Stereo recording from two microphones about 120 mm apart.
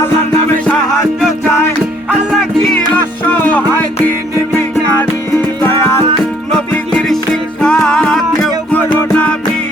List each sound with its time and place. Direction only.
4.4 s music: 20° left (ahead or behind)
7.6 s music: 10° left (ahead or behind)